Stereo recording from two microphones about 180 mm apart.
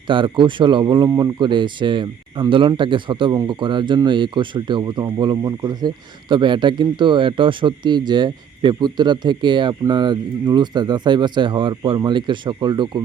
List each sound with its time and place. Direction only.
0.1 s speech: 25° right (ahead or behind)